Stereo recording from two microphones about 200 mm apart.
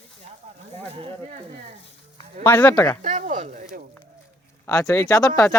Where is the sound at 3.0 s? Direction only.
35° right (ahead or behind).